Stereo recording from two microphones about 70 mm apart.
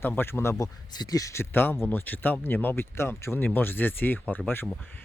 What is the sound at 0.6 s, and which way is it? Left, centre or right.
Speech, left.